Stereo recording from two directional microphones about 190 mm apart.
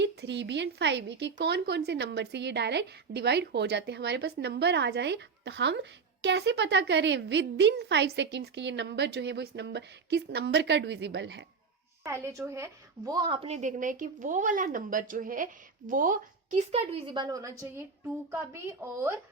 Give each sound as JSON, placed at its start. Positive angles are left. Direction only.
{"t": 0.0, "sound": "a woman's voice", "side_deg": -65}
{"t": 12.0, "sound": "a woman's voice", "side_deg": -15}
{"t": 17.2, "sound": "speech", "side_deg": -15}